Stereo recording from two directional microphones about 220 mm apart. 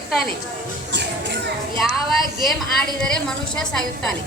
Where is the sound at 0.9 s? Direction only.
50° right (ahead or behind).